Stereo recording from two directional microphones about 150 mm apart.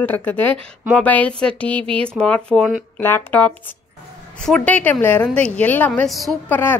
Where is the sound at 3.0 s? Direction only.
10° left (ahead or behind).